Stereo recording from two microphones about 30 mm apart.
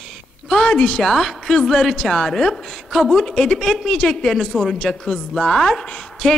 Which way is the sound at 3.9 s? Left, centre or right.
Left.